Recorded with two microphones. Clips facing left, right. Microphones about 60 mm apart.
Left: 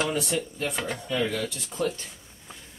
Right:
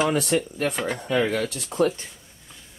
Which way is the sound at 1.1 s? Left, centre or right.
Right.